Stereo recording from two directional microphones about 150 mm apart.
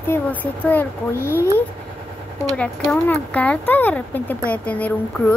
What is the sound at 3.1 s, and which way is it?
A woman's voice, 10° left (ahead or behind).